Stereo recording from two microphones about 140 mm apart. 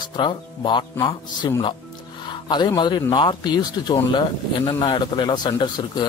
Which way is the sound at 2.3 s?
30° left (ahead or behind).